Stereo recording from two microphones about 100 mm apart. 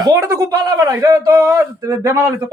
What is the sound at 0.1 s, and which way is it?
Speech, 30° right (ahead or behind).